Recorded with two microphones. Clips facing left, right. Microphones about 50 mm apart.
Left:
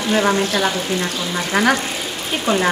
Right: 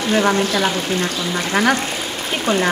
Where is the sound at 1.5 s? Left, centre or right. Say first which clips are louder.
Even; right.